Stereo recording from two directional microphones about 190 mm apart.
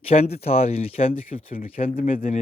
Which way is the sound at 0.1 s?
35° left (ahead or behind).